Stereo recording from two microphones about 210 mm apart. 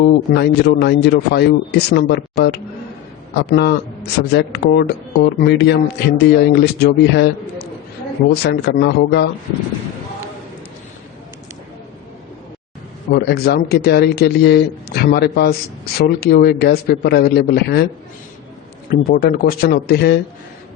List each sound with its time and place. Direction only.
0.0 s speech: 55° left (ahead or behind)
13.1 s speech: 45° left (ahead or behind)
18.9 s speech: 45° left (ahead or behind)